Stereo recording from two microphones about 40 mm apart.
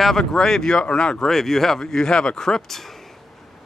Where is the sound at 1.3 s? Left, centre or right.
Centre.